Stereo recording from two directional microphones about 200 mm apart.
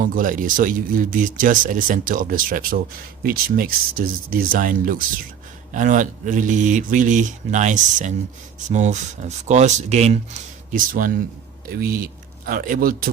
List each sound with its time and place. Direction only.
0.0 s speech: 40° right (ahead or behind)